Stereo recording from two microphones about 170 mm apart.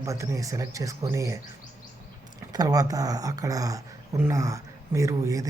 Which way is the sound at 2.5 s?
20° right (ahead or behind).